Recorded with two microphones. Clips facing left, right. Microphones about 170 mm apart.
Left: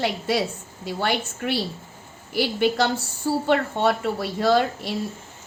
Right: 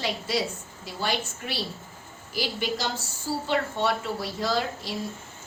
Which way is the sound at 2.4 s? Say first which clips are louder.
Left 8 dB; 60° left (ahead or behind).